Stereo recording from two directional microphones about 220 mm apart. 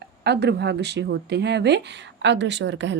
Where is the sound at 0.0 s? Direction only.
50° right (ahead or behind).